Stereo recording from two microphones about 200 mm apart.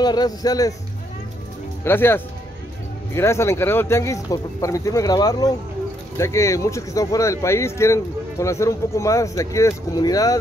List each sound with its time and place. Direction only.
0.0 s speech: 20° left (ahead or behind)
1.9 s speech: 10° left (ahead or behind)